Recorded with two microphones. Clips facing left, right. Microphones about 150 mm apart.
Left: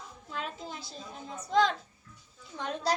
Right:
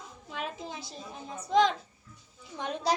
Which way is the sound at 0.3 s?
20° right (ahead or behind).